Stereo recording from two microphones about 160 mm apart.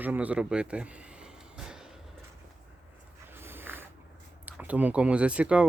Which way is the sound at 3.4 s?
15° right (ahead or behind).